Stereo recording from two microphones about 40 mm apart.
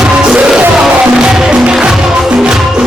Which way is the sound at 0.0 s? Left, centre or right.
Centre.